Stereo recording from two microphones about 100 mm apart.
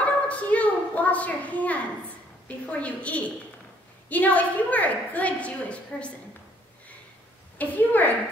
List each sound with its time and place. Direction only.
0.0 s a sound: 15° left (ahead or behind)
2.4 s a woman's voice: 15° left (ahead or behind)
7.5 s a woman's voice: 15° left (ahead or behind)